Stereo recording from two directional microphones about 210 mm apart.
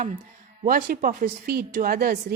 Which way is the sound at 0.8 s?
40° right (ahead or behind).